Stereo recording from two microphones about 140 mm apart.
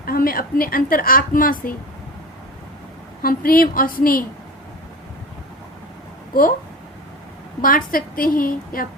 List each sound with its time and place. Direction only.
0.0 s a woman's voice: 90° left
3.2 s a woman's voice: 90° left
7.6 s a woman's voice: 85° left